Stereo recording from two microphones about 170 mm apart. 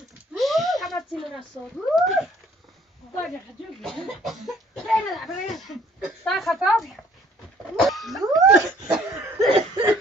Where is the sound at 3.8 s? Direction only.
Centre (ahead or behind).